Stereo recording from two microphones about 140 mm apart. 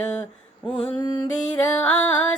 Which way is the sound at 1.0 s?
30° left (ahead or behind).